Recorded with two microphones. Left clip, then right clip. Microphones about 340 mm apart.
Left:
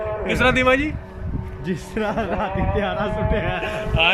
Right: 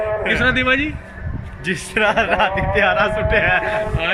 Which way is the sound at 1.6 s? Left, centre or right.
Right.